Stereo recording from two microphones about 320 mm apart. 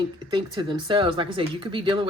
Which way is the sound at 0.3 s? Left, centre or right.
Centre.